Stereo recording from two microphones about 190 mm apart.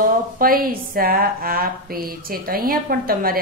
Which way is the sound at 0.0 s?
50° right (ahead or behind).